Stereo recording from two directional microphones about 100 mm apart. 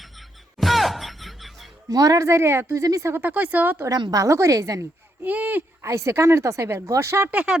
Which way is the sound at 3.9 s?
40° right (ahead or behind).